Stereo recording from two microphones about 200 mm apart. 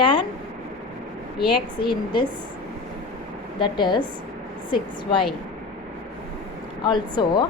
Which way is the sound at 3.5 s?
25° left (ahead or behind).